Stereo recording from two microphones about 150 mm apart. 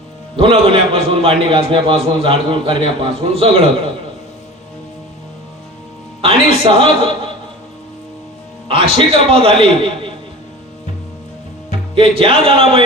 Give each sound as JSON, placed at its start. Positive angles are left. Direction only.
{"t": 0.3, "sound": "a man's voice", "side_deg": -35}
{"t": 6.2, "sound": "a man's voice", "side_deg": -40}
{"t": 8.6, "sound": "a man's voice", "side_deg": -35}
{"t": 11.7, "sound": "speech", "side_deg": -40}